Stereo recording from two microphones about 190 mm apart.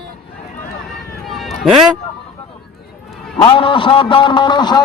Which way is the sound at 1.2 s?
Centre (ahead or behind).